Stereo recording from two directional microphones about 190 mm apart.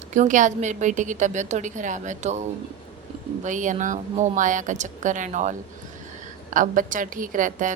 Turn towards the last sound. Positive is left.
turn(degrees=-45)  # may be behind; listen again after turning